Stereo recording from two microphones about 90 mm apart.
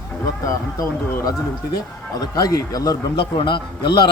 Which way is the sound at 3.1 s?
60° left (ahead or behind).